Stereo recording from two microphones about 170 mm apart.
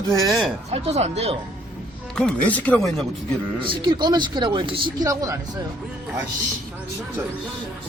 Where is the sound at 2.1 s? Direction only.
5° left (ahead or behind).